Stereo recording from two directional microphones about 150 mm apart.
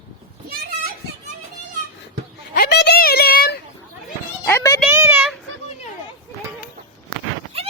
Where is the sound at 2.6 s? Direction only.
90° left.